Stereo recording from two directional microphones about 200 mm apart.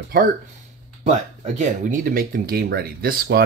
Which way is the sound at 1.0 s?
35° right (ahead or behind).